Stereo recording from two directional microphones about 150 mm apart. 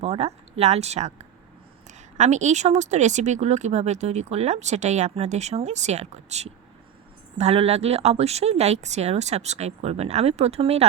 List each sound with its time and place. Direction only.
0.0 s speech: 45° right (ahead or behind)